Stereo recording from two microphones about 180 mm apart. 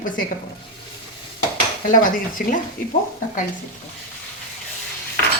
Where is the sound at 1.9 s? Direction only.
50° left (ahead or behind).